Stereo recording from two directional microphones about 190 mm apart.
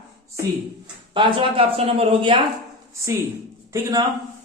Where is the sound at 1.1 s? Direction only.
25° right (ahead or behind).